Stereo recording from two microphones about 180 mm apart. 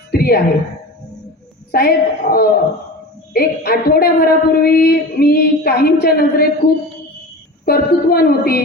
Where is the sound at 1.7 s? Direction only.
55° left (ahead or behind).